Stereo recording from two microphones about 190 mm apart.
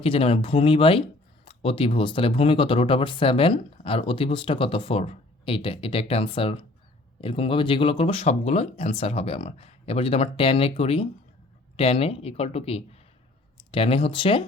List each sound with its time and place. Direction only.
0.0 s speech: 30° left (ahead or behind)